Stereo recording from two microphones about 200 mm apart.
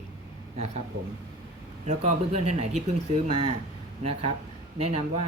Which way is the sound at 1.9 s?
30° right (ahead or behind).